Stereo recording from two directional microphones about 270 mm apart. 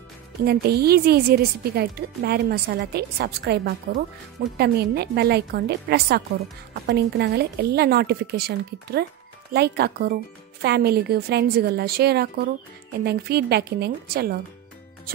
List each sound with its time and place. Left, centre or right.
0.5 s speech: right